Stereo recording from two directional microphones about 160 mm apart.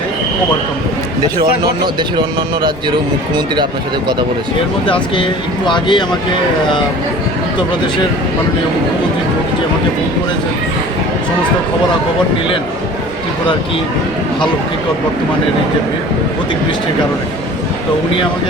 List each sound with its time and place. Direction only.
1.4 s speech: 30° right (ahead or behind)
4.9 s speech: 30° left (ahead or behind)